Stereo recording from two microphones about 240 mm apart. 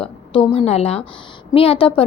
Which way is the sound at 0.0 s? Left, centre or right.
Left.